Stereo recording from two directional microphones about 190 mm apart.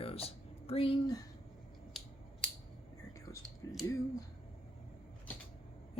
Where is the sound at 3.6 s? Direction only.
15° left (ahead or behind).